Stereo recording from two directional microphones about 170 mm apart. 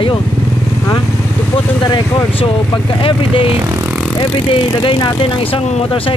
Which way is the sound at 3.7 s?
15° right (ahead or behind).